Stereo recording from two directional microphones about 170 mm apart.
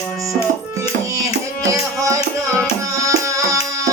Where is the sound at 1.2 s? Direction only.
20° right (ahead or behind).